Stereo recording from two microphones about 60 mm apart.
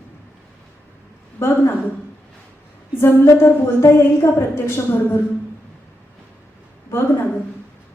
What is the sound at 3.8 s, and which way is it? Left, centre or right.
Speech, left.